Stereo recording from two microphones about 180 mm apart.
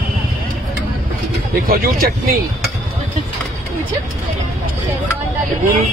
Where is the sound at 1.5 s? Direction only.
55° right (ahead or behind).